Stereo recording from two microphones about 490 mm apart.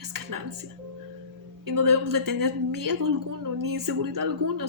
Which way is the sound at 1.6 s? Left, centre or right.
Right.